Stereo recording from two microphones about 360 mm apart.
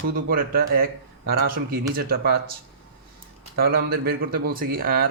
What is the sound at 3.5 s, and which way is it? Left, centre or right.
A man's voice, right.